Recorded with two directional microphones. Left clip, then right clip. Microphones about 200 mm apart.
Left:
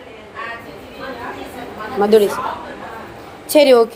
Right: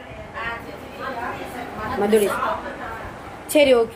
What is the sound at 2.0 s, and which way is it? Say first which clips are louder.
Speech: left 6 dB; 25° left (ahead or behind).